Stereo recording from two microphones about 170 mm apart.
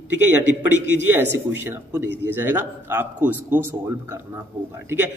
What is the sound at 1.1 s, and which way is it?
A man's voice, 10° right (ahead or behind).